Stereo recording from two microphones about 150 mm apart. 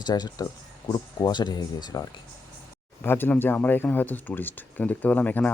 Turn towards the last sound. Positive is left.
turn(degrees=10)  # may be behind; listen again after turning